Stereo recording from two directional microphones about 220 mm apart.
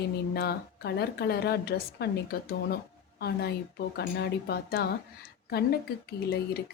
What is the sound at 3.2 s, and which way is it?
A woman's voice, 45° left (ahead or behind).